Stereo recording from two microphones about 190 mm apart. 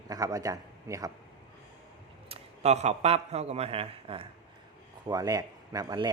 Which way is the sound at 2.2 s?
35° right (ahead or behind).